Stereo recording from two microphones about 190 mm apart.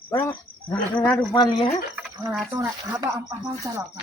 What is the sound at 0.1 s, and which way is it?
Insect, 10° left (ahead or behind).